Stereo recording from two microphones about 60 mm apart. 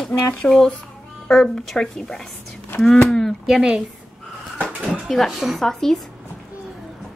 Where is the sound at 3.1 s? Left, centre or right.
Centre.